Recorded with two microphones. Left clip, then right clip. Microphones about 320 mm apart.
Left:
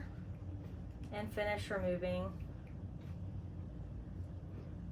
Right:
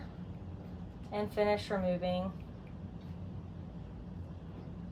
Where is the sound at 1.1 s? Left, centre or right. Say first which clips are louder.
Right 7 dB; centre.